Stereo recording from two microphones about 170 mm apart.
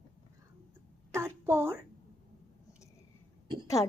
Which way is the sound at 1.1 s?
15° right (ahead or behind).